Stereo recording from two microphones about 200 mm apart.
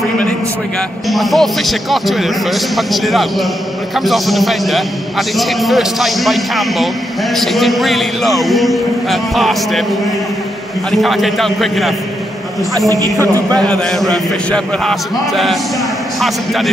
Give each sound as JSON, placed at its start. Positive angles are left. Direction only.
{"t": 1.0, "sound": "a man's voice", "side_deg": 0}
{"t": 10.9, "sound": "a man's voice", "side_deg": 0}
{"t": 12.7, "sound": "speech", "side_deg": -15}
{"t": 13.6, "sound": "a man's voice", "side_deg": 5}